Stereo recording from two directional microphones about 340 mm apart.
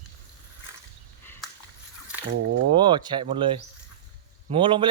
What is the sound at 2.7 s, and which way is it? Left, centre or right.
A man's voice, centre.